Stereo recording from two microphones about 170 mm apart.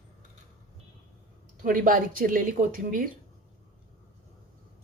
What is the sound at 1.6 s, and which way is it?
A woman's voice, 55° right (ahead or behind).